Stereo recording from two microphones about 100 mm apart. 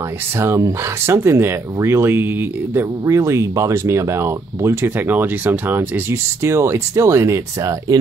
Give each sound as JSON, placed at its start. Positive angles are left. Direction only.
{"t": 0.4, "sound": "speech", "side_deg": -30}